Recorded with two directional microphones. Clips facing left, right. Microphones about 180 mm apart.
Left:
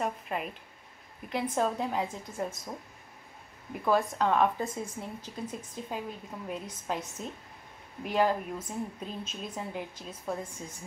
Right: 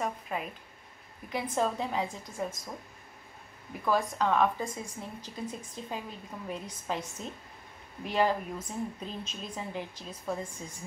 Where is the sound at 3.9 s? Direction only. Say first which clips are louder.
Left 1 dB; centre (ahead or behind).